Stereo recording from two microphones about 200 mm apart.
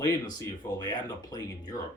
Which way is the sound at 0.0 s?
20° left (ahead or behind).